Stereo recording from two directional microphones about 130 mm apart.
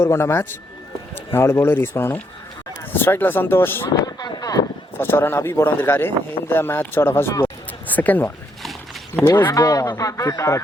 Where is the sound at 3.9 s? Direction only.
30° left (ahead or behind).